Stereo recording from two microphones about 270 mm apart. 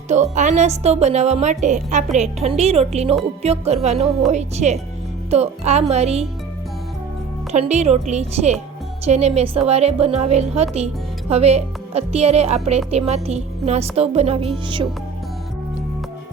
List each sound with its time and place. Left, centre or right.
0.1 s a woman's voice: right
7.5 s a woman's voice: right